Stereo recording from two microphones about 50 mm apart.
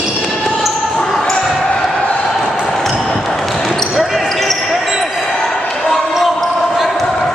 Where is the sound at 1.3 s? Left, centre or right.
Centre.